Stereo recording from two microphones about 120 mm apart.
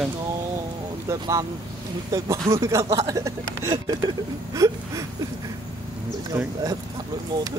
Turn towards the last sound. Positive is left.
turn(degrees=-30)  # may be behind; listen again after turning